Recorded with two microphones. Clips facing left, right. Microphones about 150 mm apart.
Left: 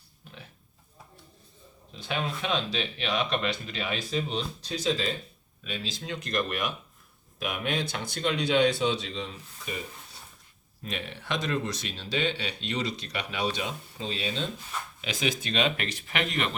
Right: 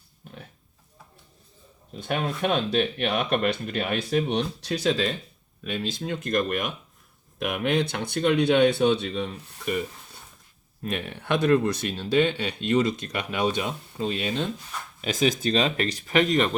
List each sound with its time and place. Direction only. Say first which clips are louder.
0.2 s pig: right 5 dB; 50° right (ahead or behind)
1.9 s speech: right 4 dB; 50° right (ahead or behind)
5.6 s speech: right 6 dB; 55° right (ahead or behind)
10.8 s speech: right 6 dB; 50° right (ahead or behind)